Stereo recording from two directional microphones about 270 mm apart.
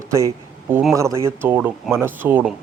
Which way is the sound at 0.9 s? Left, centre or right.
Centre.